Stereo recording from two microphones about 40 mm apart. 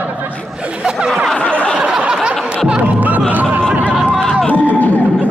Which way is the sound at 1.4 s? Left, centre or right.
Left.